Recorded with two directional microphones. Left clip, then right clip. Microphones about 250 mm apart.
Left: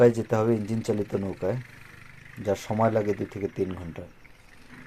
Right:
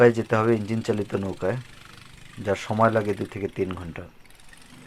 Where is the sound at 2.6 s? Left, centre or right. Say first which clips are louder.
Right 4 dB; centre.